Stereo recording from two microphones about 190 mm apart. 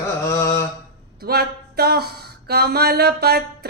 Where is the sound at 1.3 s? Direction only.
55° right (ahead or behind).